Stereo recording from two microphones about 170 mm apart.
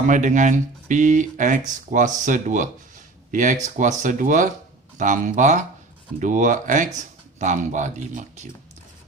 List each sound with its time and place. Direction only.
0.1 s speech: 45° right (ahead or behind)